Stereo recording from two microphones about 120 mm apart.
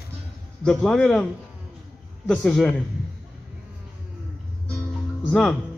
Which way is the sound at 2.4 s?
Centre (ahead or behind).